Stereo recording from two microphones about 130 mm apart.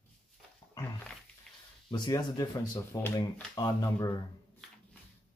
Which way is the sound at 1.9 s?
35° left (ahead or behind).